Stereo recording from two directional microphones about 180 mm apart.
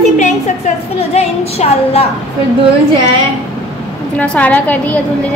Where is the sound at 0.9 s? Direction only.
35° left (ahead or behind).